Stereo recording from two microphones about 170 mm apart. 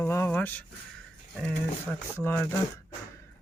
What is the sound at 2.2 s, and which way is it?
Speech, 10° left (ahead or behind).